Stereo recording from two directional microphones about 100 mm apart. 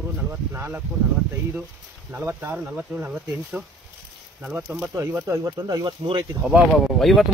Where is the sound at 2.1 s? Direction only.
15° right (ahead or behind).